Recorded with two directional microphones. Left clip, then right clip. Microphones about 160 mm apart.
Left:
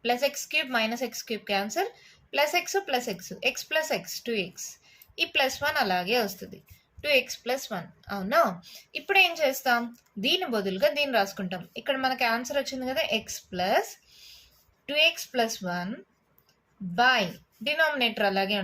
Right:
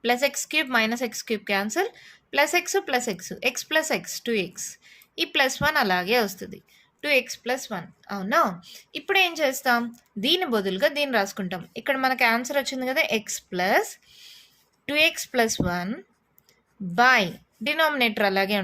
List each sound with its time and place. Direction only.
0.0 s a woman's voice: 50° right (ahead or behind)
16.9 s a woman's voice: 55° right (ahead or behind)